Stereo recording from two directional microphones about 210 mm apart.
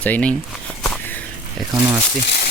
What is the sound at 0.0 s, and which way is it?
Speech, 5° left (ahead or behind).